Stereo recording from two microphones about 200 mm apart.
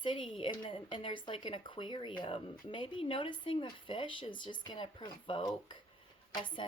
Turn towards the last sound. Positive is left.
turn(degrees=25)  # may be behind; listen again after turning